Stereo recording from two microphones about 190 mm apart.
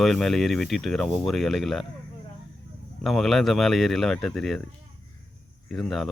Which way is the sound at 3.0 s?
Centre (ahead or behind).